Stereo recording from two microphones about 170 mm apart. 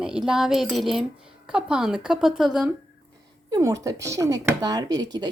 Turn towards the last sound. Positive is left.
turn(degrees=-25)  # may be behind; listen again after turning